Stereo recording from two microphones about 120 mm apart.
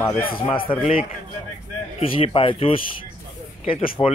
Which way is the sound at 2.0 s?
55° left (ahead or behind).